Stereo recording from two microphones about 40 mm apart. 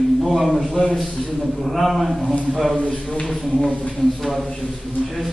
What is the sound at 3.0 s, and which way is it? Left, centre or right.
Speech, left.